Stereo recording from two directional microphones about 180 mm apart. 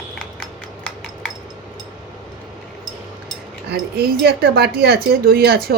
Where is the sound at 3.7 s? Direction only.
60° right (ahead or behind).